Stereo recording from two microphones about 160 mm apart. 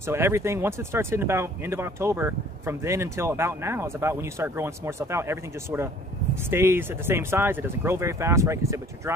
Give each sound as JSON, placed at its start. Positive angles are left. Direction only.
{"t": 0.0, "sound": "speech", "side_deg": -15}